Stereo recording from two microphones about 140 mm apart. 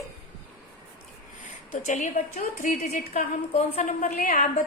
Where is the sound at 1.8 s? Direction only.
60° left (ahead or behind).